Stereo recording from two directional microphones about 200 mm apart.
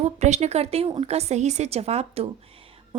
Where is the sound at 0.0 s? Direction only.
35° right (ahead or behind).